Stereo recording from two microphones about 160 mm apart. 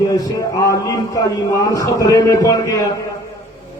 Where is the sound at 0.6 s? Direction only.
20° left (ahead or behind).